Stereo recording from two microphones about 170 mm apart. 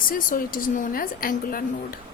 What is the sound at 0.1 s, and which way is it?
A woman's voice, 55° left (ahead or behind).